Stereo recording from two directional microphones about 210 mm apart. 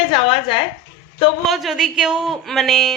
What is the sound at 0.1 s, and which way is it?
Speech, 25° left (ahead or behind).